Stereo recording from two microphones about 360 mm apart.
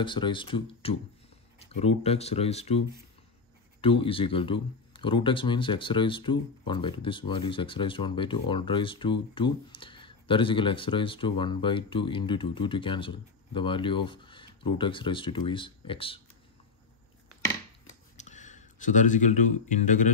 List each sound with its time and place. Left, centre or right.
0.0 s speech: centre
3.8 s speech: centre
18.1 s speech: centre